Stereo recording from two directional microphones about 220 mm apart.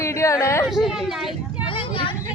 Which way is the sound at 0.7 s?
Centre (ahead or behind).